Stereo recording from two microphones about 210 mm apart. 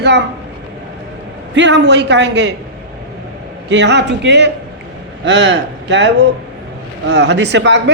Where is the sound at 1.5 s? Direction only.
60° right (ahead or behind).